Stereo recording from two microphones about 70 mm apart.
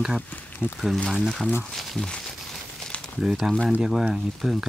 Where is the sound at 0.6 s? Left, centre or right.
Left.